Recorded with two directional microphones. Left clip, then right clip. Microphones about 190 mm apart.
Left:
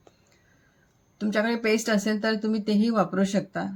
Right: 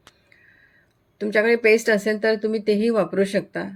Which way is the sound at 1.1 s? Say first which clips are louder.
Right 7 dB; 5° right (ahead or behind).